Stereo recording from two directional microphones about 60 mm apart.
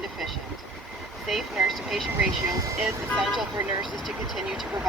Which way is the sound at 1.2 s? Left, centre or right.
Centre.